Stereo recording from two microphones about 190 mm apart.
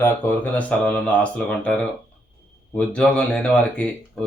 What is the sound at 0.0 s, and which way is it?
Speech, 10° left (ahead or behind).